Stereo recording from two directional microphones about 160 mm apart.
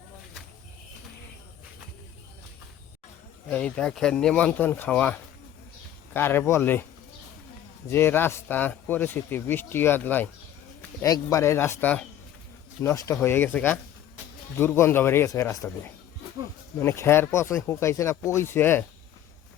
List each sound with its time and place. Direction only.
3.5 s speech: 5° left (ahead or behind)
7.9 s speech: 15° left (ahead or behind)